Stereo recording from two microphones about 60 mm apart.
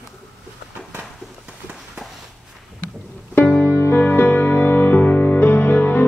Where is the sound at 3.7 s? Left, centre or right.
Left.